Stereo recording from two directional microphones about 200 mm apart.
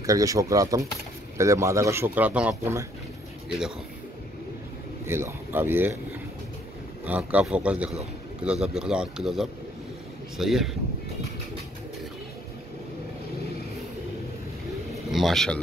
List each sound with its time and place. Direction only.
0.0 s a man's voice: 15° right (ahead or behind)
5.0 s a man's voice: 10° right (ahead or behind)
7.1 s speech: 5° right (ahead or behind)
15.0 s speech: centre (ahead or behind)